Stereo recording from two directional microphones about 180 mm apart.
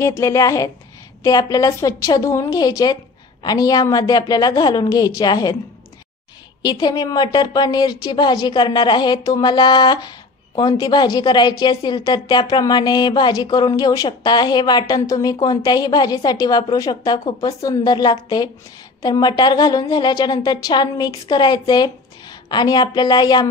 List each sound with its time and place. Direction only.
0.0 s a woman's voice: 15° left (ahead or behind)
6.6 s a woman's voice: 25° left (ahead or behind)